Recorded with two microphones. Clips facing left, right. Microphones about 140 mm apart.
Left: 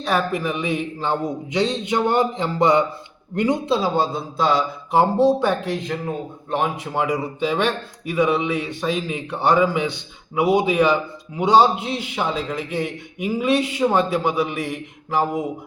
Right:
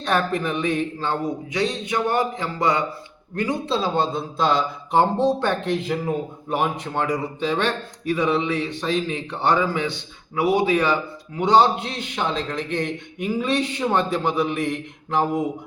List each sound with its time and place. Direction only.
0.0 s a man's voice: 5° left (ahead or behind)